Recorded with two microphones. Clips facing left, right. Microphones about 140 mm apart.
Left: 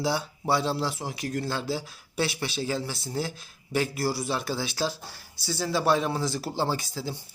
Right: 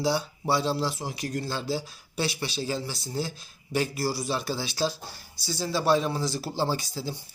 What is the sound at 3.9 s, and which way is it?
Speech, 25° left (ahead or behind).